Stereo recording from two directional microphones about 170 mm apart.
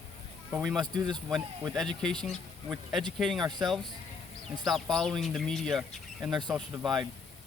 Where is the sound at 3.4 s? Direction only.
25° right (ahead or behind).